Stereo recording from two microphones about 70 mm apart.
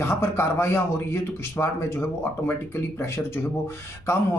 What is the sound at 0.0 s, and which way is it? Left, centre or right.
Speech, left.